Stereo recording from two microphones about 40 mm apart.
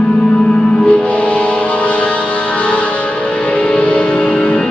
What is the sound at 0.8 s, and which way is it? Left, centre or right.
Music, left.